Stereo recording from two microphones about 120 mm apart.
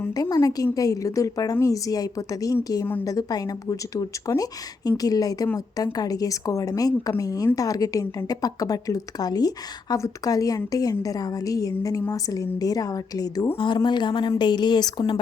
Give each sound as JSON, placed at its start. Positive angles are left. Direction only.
{"t": 0.1, "sound": "a woman's voice", "side_deg": 35}